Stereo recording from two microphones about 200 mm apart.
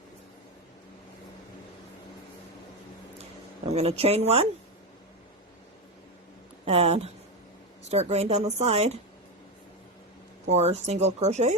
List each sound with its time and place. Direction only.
3.7 s speech: 30° right (ahead or behind)
6.7 s speech: 30° right (ahead or behind)
10.5 s speech: 30° right (ahead or behind)